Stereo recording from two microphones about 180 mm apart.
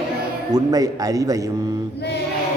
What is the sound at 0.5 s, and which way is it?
Speech, 20° right (ahead or behind).